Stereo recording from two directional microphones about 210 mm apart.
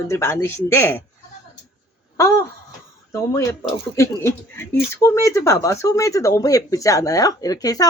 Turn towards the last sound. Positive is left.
turn(degrees=15)  # may be behind; listen again after turning